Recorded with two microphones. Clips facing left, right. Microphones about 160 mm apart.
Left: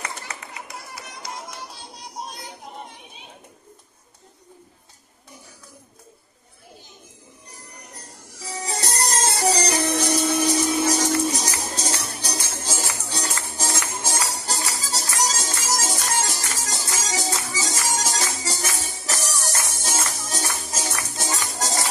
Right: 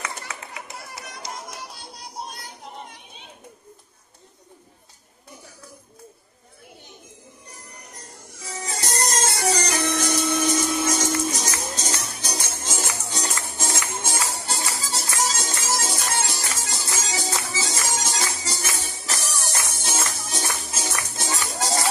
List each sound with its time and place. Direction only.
8.6 s music: 30° left (ahead or behind)